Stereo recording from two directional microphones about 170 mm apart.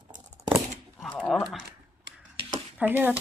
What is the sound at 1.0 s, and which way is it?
Speech, 5° left (ahead or behind).